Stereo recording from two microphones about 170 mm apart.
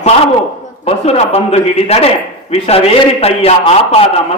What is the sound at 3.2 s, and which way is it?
Speech, 35° left (ahead or behind).